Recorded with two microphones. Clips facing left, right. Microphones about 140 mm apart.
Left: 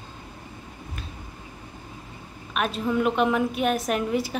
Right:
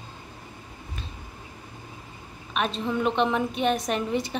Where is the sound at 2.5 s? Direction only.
5° left (ahead or behind).